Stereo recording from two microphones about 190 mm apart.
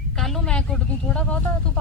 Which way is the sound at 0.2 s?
Centre (ahead or behind).